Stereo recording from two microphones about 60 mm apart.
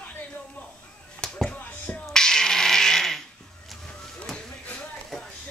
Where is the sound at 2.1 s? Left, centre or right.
Centre.